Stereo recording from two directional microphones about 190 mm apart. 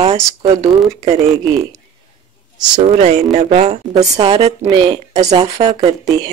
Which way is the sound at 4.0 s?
25° right (ahead or behind).